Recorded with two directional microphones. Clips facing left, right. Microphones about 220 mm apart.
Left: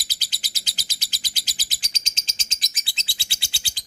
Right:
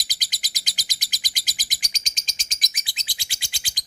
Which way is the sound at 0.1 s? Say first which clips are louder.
Even; 15° right (ahead or behind).